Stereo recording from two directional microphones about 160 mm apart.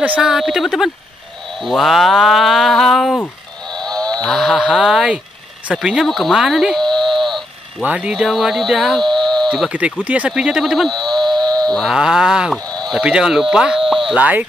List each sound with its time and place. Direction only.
0.0 s speech: 5° right (ahead or behind)
9.7 s speech: 10° right (ahead or behind)
11.2 s a sound: 25° right (ahead or behind)
11.6 s speech: 5° left (ahead or behind)
12.6 s sheep: 25° right (ahead or behind)
12.9 s speech: 5° right (ahead or behind)